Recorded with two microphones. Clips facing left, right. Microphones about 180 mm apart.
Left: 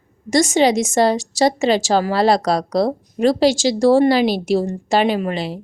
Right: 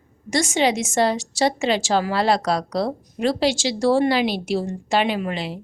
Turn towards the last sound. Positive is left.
turn(degrees=40)  # may be behind; listen again after turning